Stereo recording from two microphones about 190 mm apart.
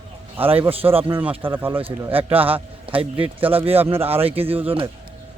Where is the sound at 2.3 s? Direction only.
30° right (ahead or behind).